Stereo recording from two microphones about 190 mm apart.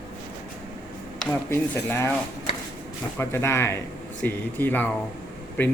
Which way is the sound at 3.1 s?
15° left (ahead or behind).